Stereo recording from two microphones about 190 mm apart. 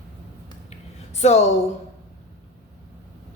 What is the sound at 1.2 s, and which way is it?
Speech, 35° left (ahead or behind).